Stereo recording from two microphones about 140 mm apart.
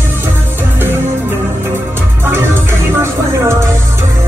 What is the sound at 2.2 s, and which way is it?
Music, 15° right (ahead or behind).